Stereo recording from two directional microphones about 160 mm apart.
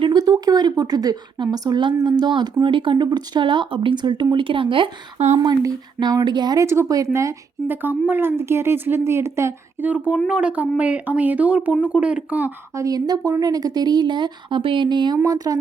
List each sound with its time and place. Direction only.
0.0 s speech: 25° right (ahead or behind); by 5.4 s 40° right (ahead or behind)
5.4 s speech: 25° right (ahead or behind)